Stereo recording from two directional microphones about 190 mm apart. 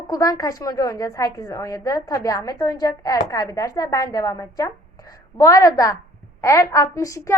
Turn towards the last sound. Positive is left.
turn(degrees=15)  # may be behind; listen again after turning